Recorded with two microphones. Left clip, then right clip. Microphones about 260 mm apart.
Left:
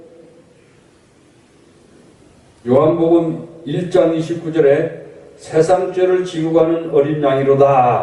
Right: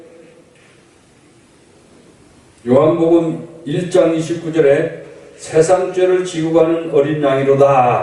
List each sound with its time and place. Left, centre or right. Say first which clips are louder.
2.6 s a man's voice: right 1 dB; left